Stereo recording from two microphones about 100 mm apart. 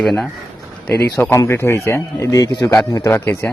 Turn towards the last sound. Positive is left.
turn(degrees=20)  # may be behind; listen again after turning